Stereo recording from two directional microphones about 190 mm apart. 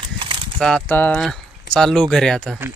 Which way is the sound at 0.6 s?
5° left (ahead or behind).